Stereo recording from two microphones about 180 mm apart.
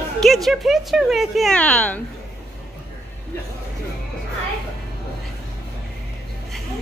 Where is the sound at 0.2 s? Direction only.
Centre (ahead or behind).